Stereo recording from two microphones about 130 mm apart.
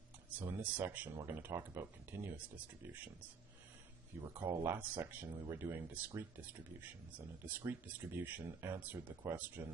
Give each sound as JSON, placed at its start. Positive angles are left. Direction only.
{"t": 0.4, "sound": "speech", "side_deg": -15}
{"t": 4.2, "sound": "speech", "side_deg": -20}